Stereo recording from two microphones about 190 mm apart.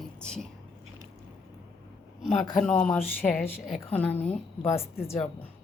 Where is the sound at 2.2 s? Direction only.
Centre (ahead or behind).